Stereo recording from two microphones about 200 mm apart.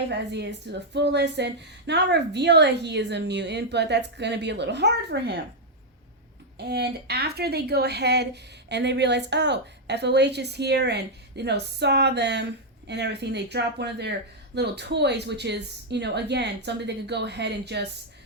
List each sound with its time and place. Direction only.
0.1 s speech: 60° right (ahead or behind)
6.6 s speech: 55° right (ahead or behind)